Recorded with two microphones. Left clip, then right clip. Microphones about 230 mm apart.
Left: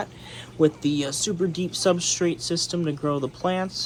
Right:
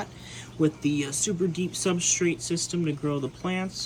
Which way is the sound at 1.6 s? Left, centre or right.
Centre.